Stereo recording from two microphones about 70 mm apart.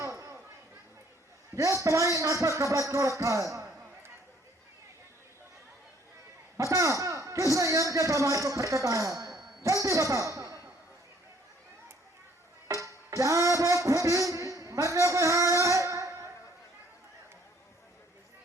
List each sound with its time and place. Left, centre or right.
0.0 s chatter: right
1.5 s a man's voice: right
6.6 s a man's voice: right
12.6 s music: right
14.3 s a sound: right